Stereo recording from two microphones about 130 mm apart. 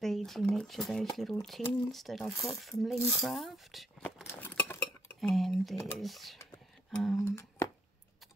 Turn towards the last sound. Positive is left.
turn(degrees=25)  # may be behind; listen again after turning